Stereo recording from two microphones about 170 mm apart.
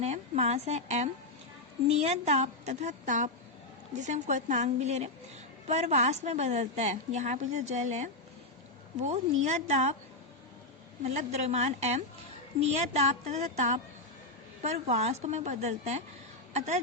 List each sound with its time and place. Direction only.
0.0 s a woman's voice: 40° right (ahead or behind)
11.0 s a woman's voice: 40° right (ahead or behind)